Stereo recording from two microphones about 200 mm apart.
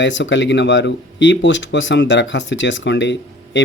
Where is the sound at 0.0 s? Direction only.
65° left (ahead or behind).